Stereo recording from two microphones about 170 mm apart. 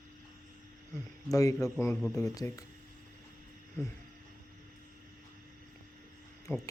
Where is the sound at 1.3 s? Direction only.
20° left (ahead or behind).